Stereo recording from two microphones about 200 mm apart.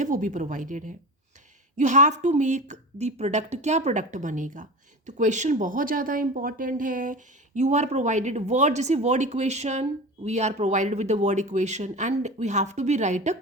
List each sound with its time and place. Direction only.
0.0 s speech: 40° right (ahead or behind)